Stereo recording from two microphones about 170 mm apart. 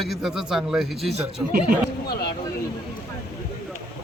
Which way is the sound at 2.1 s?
65° left (ahead or behind).